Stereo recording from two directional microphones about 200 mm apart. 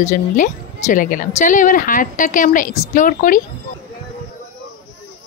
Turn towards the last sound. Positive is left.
turn(degrees=45)  # may be behind; listen again after turning